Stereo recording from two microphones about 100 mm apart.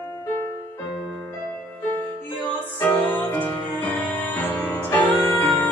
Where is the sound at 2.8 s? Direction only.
15° left (ahead or behind).